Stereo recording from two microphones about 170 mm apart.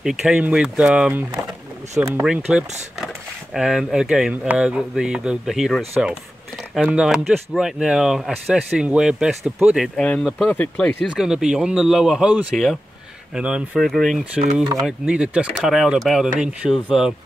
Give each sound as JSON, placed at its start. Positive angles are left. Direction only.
{"t": 0.0, "sound": "speech", "side_deg": -5}
{"t": 11.1, "sound": "speech", "side_deg": -5}